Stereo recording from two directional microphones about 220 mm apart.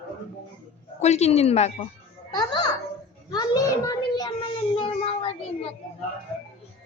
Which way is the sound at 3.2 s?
20° left (ahead or behind).